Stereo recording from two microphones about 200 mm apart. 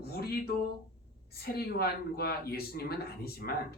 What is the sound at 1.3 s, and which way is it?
Speech, 50° left (ahead or behind).